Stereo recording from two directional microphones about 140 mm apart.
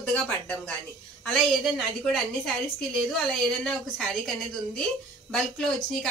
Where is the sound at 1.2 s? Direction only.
Centre (ahead or behind).